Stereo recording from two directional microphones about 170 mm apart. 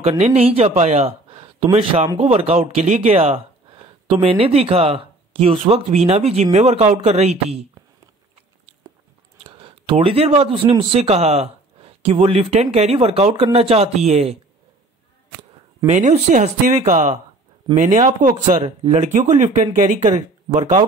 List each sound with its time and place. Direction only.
0.2 s speech: 40° right (ahead or behind)
9.4 s speech: 30° right (ahead or behind)
15.9 s speech: 45° right (ahead or behind)